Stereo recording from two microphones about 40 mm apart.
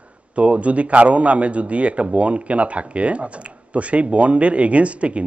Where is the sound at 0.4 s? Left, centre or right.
Right.